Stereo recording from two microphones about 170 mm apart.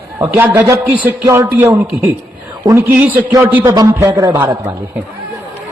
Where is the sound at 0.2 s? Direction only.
15° right (ahead or behind).